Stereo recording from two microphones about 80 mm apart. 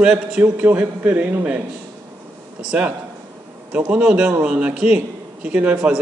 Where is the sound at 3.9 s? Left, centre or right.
Centre.